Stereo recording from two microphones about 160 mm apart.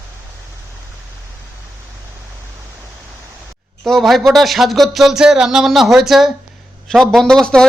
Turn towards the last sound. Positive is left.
turn(degrees=5)  # may be behind; listen again after turning